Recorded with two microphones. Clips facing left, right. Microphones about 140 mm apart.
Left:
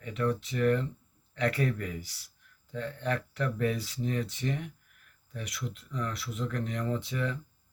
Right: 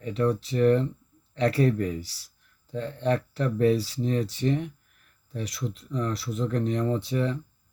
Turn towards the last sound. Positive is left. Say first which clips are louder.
# right 6 dB
turn(degrees=-35)  # may be behind; listen again after turning